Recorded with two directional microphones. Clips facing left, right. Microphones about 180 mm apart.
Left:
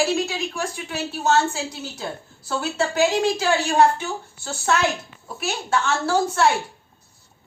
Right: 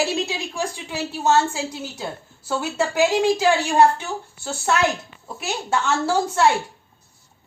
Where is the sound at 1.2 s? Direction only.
15° right (ahead or behind).